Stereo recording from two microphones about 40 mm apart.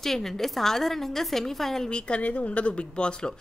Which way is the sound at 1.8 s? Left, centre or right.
Left.